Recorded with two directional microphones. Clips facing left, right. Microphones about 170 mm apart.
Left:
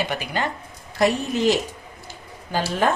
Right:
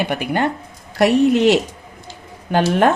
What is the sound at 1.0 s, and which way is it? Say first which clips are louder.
Speech: right 7 dB; 70° right (ahead or behind).